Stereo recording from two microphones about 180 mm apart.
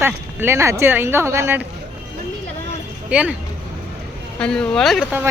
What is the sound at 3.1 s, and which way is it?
Speech, 5° right (ahead or behind).